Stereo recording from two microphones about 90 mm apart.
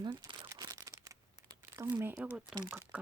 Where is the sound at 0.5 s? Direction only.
40° right (ahead or behind).